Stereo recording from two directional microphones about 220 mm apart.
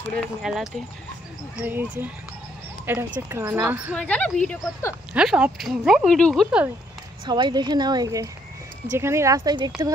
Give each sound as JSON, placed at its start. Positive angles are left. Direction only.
{"t": 0.1, "sound": "speech", "side_deg": 0}
{"t": 3.9, "sound": "speech", "side_deg": 5}
{"t": 5.1, "sound": "speech", "side_deg": -5}
{"t": 7.2, "sound": "a woman's voice", "side_deg": -20}